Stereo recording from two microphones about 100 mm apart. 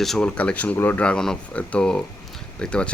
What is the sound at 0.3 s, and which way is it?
Speech, 15° left (ahead or behind).